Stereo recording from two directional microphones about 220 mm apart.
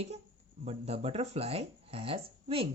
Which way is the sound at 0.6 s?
30° right (ahead or behind).